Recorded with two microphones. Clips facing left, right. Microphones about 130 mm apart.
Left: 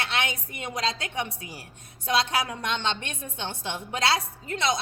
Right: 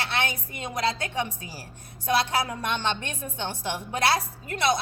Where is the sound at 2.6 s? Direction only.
20° left (ahead or behind).